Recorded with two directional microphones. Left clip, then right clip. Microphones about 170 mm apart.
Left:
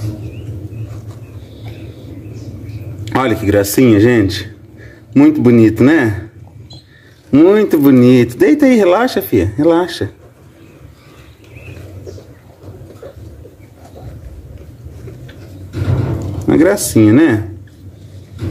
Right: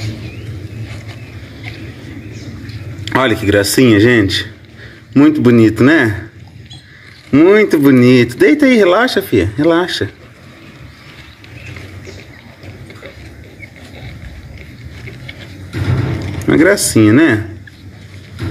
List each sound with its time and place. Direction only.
3.1 s speech: 5° left (ahead or behind)
7.2 s speech: 10° left (ahead or behind)
16.4 s speech: 5° left (ahead or behind)